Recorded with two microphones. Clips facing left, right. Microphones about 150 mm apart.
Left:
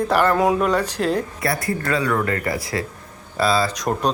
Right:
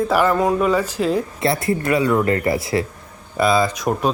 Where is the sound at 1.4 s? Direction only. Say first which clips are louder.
Right 4 dB; 25° right (ahead or behind).